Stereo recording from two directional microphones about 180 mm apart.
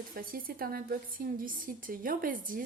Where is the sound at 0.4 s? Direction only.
55° right (ahead or behind).